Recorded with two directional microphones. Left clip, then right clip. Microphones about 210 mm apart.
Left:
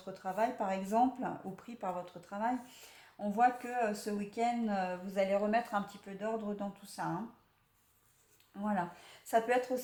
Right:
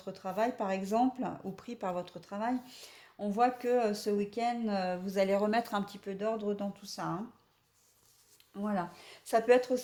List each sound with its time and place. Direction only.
0.0 s speech: 40° right (ahead or behind)
8.5 s speech: 40° right (ahead or behind)